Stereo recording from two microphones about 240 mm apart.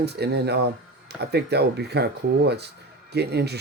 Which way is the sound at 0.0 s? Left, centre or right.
Right.